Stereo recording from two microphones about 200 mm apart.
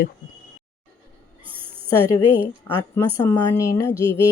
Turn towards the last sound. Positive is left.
turn(degrees=15)  # may be behind; listen again after turning